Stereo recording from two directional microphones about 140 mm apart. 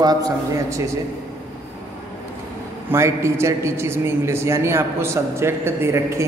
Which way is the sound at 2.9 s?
20° right (ahead or behind).